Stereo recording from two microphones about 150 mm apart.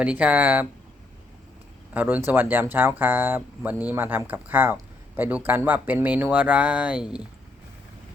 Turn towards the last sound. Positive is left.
turn(degrees=-5)  # may be behind; listen again after turning